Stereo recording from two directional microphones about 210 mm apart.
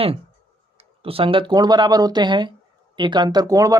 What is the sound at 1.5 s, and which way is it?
Speech, 20° right (ahead or behind).